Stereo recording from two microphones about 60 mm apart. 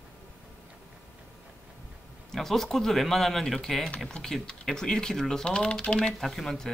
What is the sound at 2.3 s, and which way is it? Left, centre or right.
Speech, centre.